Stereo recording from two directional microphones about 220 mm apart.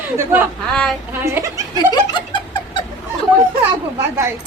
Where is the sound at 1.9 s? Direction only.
20° left (ahead or behind).